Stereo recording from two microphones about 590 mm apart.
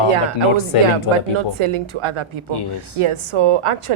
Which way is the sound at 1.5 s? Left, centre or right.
Right.